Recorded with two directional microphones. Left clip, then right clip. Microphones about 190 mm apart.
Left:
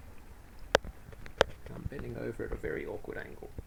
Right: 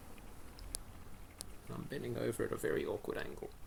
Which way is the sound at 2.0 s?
Centre (ahead or behind).